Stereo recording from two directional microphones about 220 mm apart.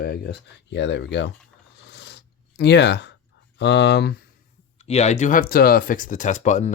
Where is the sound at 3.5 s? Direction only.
50° left (ahead or behind).